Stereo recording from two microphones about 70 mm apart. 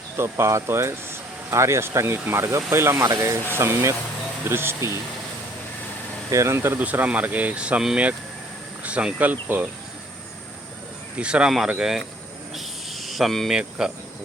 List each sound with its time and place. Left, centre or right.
0.2 s speech: right
6.3 s speech: right
6.7 s speech: right
11.2 s cricket: centre
12.5 s snake: centre
13.5 s cricket: centre